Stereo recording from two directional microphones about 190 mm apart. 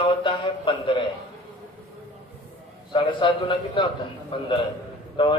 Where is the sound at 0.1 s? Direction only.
25° left (ahead or behind).